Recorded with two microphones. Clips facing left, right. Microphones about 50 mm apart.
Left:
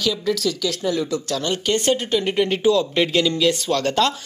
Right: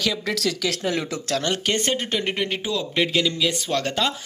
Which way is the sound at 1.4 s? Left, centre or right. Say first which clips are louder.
Left 2 dB; right.